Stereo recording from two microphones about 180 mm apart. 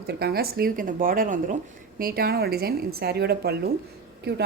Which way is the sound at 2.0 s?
55° right (ahead or behind).